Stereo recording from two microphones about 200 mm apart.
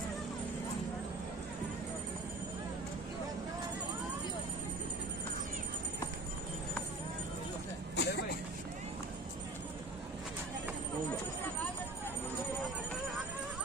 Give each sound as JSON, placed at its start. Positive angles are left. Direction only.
{"t": 8.0, "sound": "vehicle", "side_deg": 55}